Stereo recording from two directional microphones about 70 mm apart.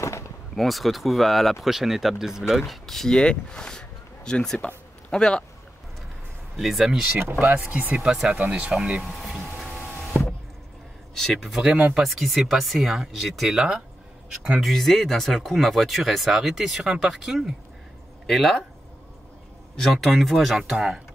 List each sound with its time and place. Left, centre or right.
0.6 s speech: centre
6.5 s speech: centre
7.3 s speech: right
9.0 s a sound: centre
11.1 s speech: centre
19.8 s speech: centre